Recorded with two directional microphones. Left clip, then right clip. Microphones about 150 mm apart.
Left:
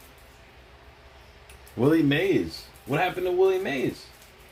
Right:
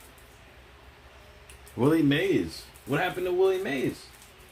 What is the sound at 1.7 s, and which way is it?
Speech, 10° right (ahead or behind).